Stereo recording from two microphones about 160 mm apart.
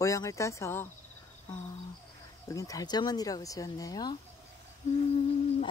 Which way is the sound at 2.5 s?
20° left (ahead or behind).